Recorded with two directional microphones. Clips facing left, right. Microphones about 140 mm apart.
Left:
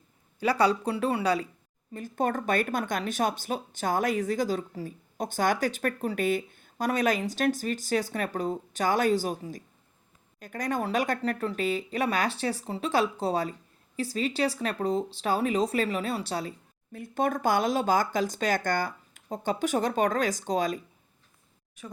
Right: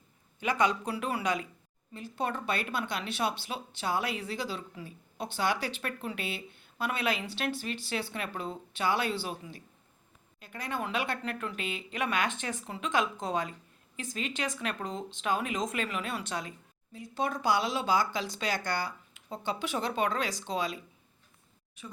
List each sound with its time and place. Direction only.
0.3 s speech: 35° left (ahead or behind)
1.9 s speech: 45° left (ahead or behind)
16.9 s speech: 55° left (ahead or behind)